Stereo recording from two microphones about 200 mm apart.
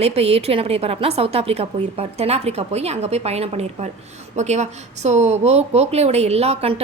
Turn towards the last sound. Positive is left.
turn(degrees=-30)  # may be behind; listen again after turning